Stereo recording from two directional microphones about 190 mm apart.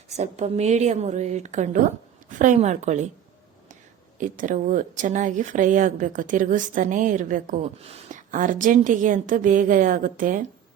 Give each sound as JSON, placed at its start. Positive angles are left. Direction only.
{"t": 0.1, "sound": "a woman's voice", "side_deg": -35}
{"t": 4.2, "sound": "a woman's voice", "side_deg": -45}